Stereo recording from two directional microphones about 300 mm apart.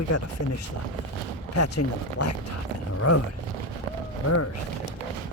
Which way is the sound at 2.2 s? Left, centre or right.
Left.